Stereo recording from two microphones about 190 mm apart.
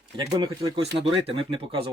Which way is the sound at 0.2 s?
20° right (ahead or behind).